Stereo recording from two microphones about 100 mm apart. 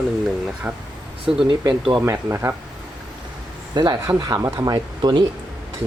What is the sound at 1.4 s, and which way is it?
Speech, 50° right (ahead or behind).